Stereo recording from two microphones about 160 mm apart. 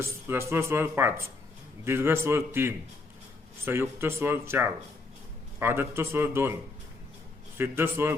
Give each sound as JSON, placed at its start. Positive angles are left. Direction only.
{"t": 0.0, "sound": "speech", "side_deg": -15}
{"t": 7.6, "sound": "speech", "side_deg": -15}